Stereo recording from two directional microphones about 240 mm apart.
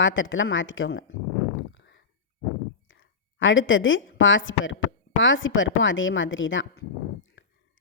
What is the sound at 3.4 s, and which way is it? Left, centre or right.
A woman's voice, left.